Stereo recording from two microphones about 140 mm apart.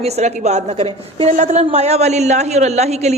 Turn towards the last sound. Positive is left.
turn(degrees=-50)  # may be behind; listen again after turning